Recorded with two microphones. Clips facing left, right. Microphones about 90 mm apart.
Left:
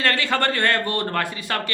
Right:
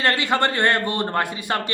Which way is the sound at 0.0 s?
20° right (ahead or behind).